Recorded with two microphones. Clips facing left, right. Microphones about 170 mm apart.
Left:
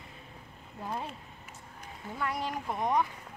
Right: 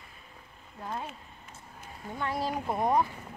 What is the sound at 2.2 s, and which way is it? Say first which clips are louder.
Speech: right 2 dB; 30° right (ahead or behind).